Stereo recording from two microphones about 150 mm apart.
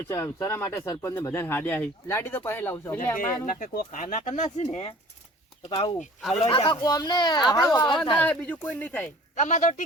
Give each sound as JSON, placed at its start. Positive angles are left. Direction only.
{"t": 0.1, "sound": "speech", "side_deg": 20}
{"t": 3.2, "sound": "speech", "side_deg": 65}
{"t": 4.7, "sound": "speech", "side_deg": 35}
{"t": 8.2, "sound": "speech", "side_deg": 10}
{"t": 9.3, "sound": "speech", "side_deg": 55}